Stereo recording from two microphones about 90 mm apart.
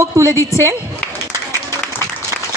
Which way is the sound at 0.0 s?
35° right (ahead or behind).